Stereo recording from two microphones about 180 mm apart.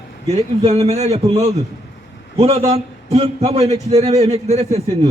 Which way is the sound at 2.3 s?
35° right (ahead or behind).